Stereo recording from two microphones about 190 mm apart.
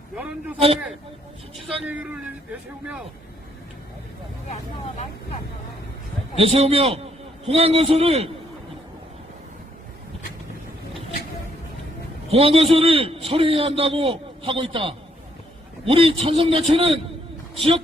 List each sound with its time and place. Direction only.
1.6 s speech: 5° right (ahead or behind)
4.4 s speech: 35° left (ahead or behind)
6.3 s a man's voice: 30° right (ahead or behind)
12.3 s a man's voice: 30° right (ahead or behind)